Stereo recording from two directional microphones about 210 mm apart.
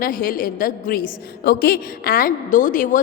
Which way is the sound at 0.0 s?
40° left (ahead or behind).